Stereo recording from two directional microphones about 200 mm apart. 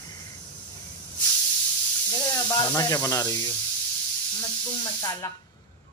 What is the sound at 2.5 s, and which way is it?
Speech, 20° left (ahead or behind).